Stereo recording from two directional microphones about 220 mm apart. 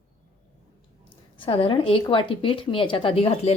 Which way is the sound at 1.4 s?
25° left (ahead or behind).